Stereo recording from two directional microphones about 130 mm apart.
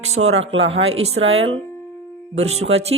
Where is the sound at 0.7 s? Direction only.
50° right (ahead or behind).